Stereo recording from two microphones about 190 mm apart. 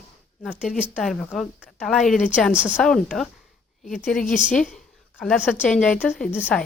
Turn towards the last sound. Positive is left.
turn(degrees=5)  # may be behind; listen again after turning